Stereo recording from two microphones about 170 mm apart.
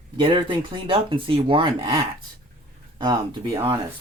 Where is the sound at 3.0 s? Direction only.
25° right (ahead or behind).